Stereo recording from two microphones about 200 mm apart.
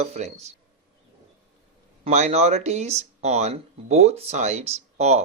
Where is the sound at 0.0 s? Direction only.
35° right (ahead or behind).